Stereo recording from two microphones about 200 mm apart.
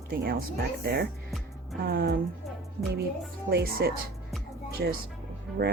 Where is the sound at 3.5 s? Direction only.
50° right (ahead or behind).